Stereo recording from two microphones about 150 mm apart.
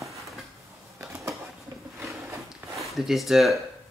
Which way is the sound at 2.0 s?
20° right (ahead or behind).